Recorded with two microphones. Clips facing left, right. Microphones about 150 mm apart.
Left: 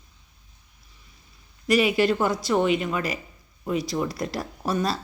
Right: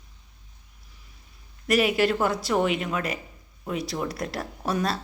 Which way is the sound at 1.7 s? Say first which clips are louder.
Left 1 dB; centre (ahead or behind).